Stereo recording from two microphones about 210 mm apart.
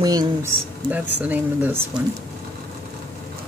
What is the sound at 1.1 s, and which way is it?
Speech, 10° right (ahead or behind).